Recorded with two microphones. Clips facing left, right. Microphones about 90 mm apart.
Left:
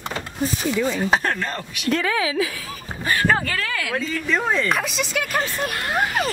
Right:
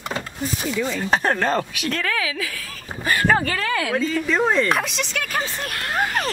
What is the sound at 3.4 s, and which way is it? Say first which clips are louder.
Speech: right 3 dB; 30° right (ahead or behind).